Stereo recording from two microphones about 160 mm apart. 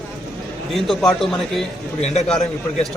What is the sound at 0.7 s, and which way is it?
A man's voice, centre (ahead or behind).